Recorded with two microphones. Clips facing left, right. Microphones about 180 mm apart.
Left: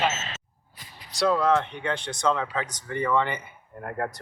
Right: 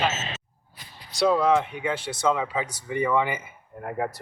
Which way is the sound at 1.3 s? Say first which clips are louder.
Right 1 dB; 5° right (ahead or behind).